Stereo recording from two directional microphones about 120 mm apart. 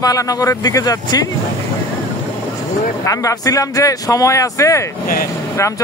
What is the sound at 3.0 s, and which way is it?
Speech, 30° left (ahead or behind).